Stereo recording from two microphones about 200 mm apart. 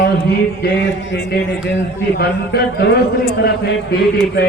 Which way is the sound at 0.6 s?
55° left (ahead or behind).